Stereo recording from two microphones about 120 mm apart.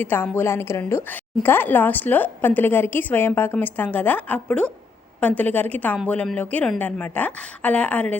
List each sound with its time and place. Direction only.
0.0 s a woman's voice: 15° left (ahead or behind)